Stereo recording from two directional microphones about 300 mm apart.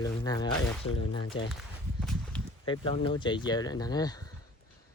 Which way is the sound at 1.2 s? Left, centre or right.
Left.